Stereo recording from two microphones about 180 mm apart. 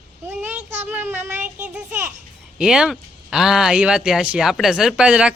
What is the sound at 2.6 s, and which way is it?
Speech, 5° right (ahead or behind).